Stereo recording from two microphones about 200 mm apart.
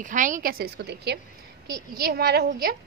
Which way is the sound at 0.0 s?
40° right (ahead or behind).